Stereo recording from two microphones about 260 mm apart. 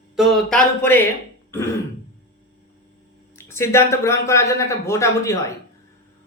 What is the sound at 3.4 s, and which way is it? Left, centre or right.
Speech, centre.